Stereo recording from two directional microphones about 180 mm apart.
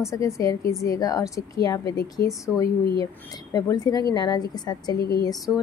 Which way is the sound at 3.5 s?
20° left (ahead or behind).